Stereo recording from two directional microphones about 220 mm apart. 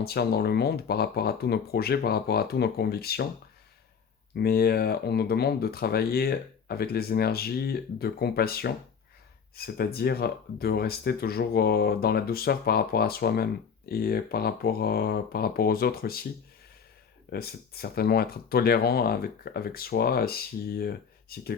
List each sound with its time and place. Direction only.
0.0 s speech: 45° left (ahead or behind)
4.4 s speech: 45° left (ahead or behind)
17.2 s speech: 45° left (ahead or behind)